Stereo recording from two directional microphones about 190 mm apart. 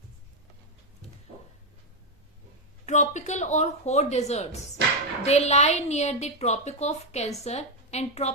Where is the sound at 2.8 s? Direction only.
40° left (ahead or behind).